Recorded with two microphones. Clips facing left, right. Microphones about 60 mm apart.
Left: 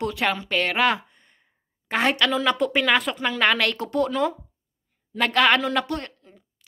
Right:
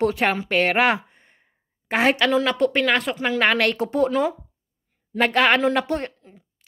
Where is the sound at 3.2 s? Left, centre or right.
Centre.